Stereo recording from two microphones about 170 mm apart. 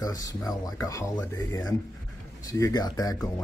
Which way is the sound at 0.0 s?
20° left (ahead or behind).